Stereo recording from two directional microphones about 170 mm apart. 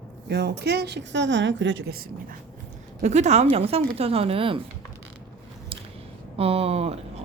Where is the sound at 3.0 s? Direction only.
40° right (ahead or behind).